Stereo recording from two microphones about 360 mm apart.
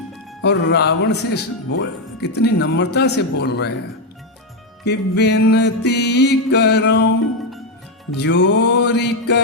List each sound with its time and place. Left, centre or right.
0.4 s music: left
4.9 s music: left
8.1 s music: left